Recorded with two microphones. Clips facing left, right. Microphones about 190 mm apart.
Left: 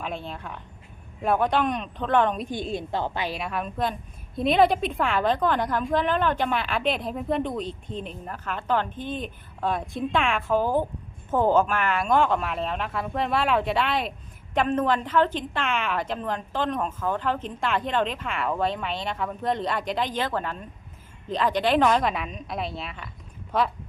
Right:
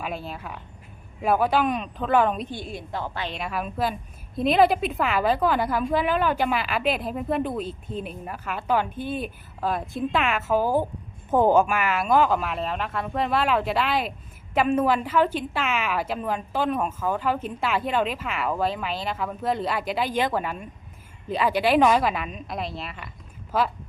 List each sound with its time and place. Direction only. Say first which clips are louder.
0.0 s a woman's voice: right 1 dB; 5° right (ahead or behind)
2.5 s a woman's voice: left 4 dB; 20° left (ahead or behind)
3.2 s a woman's voice: left 1 dB; 5° left (ahead or behind)